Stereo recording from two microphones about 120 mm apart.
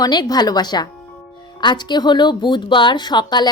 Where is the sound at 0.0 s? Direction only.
35° left (ahead or behind).